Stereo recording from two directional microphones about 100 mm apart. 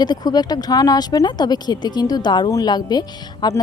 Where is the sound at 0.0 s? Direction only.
45° left (ahead or behind).